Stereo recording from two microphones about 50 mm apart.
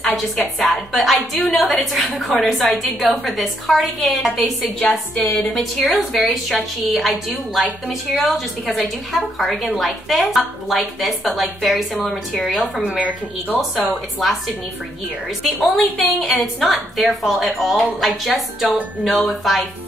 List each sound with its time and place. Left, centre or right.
0.0 s a woman's voice: centre
5.5 s a woman's voice: centre
12.7 s a woman's voice: right
13.6 s a woman's voice: centre
15.4 s a woman's voice: centre